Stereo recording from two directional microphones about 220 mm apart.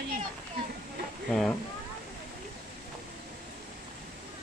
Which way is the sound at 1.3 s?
Centre (ahead or behind).